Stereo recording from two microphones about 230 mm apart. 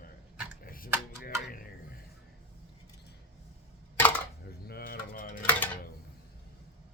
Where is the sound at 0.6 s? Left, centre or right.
Left.